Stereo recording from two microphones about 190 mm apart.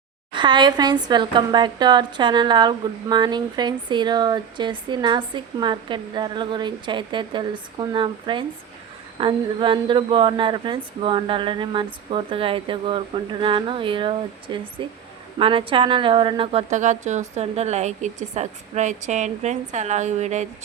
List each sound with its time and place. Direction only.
0.3 s a woman's voice: 25° right (ahead or behind)